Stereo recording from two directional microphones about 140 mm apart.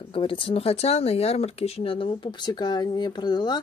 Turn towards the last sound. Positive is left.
turn(degrees=30)  # may be behind; listen again after turning